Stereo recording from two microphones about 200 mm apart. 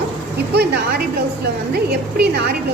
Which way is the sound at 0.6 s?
55° right (ahead or behind).